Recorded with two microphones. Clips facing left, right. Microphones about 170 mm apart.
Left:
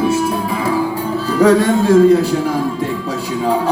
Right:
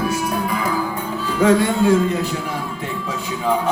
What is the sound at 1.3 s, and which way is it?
A man's voice, 40° left (ahead or behind).